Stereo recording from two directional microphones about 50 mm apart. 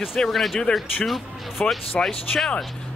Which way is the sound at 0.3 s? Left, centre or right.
Centre.